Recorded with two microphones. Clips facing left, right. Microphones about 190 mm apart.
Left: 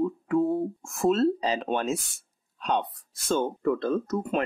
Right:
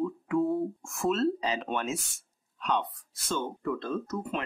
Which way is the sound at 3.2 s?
50° left (ahead or behind).